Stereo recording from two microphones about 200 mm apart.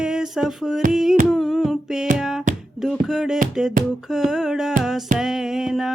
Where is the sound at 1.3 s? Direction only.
Centre (ahead or behind).